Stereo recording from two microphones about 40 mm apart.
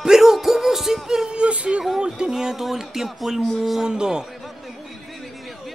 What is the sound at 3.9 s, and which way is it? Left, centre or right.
Speech, right.